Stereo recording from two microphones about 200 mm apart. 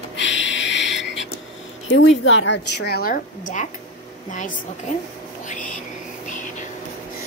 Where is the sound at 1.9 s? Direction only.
75° left (ahead or behind); by 3.2 s 50° left (ahead or behind).